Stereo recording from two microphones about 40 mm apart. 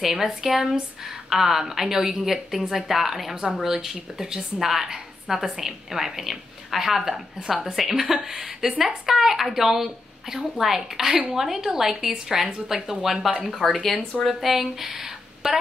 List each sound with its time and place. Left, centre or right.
0.0 s a woman's voice: centre
13.0 s a woman's voice: centre